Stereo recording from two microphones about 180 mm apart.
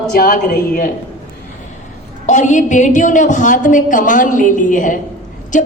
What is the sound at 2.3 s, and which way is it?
Speech, 40° left (ahead or behind).